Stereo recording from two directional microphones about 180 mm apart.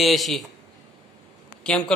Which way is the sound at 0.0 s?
Centre (ahead or behind).